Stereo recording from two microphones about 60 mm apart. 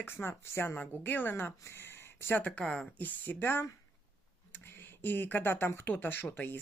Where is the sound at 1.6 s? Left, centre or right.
Left.